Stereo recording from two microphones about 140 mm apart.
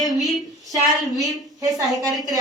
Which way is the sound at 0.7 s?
25° right (ahead or behind).